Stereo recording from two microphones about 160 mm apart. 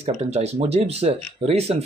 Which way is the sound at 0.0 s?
45° right (ahead or behind).